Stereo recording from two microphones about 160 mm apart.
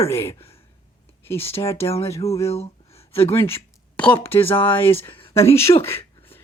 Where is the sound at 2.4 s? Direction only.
40° left (ahead or behind).